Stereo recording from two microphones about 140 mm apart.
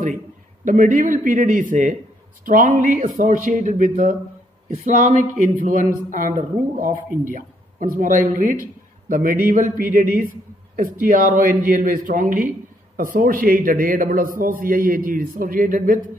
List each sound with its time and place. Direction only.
0.7 s a man's voice: 70° right (ahead or behind)